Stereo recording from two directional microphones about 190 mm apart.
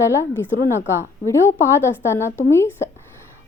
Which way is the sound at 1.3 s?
15° left (ahead or behind).